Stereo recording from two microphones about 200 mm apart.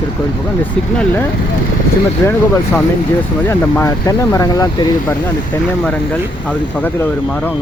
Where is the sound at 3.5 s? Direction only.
15° left (ahead or behind).